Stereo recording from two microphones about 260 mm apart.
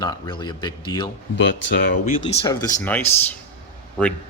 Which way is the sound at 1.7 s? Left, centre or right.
Left.